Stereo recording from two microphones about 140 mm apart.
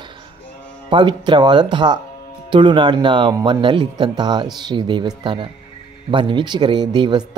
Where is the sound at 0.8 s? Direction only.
35° right (ahead or behind).